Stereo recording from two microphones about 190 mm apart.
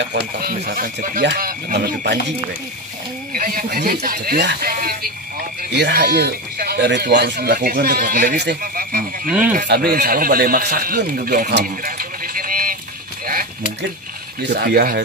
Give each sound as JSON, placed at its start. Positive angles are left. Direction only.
{"t": 0.0, "sound": "speech", "side_deg": -55}
{"t": 3.3, "sound": "speech", "side_deg": -50}
{"t": 14.4, "sound": "speech", "side_deg": -60}